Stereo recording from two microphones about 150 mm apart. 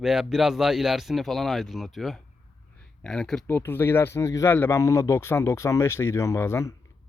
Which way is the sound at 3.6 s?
15° left (ahead or behind).